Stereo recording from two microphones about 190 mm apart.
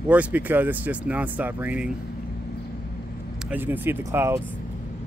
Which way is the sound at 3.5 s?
10° right (ahead or behind).